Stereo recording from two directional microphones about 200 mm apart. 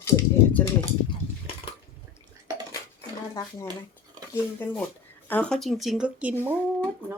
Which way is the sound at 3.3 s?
15° left (ahead or behind).